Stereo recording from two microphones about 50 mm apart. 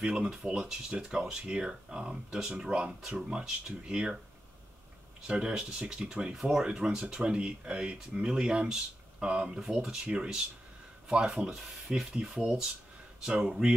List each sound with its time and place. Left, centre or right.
0.0 s speech: centre
5.2 s speech: centre
6.3 s speech: centre